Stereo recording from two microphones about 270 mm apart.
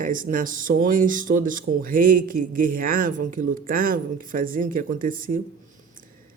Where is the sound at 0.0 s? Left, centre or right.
Right.